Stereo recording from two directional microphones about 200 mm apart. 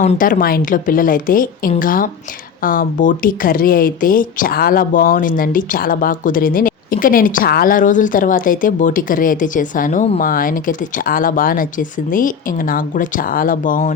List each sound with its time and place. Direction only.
0.0 s a woman's voice: 40° left (ahead or behind)